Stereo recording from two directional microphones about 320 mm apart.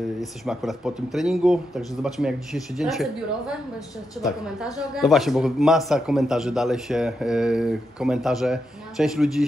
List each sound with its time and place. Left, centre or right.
0.5 s a man's voice: centre
4.9 s a man's voice: centre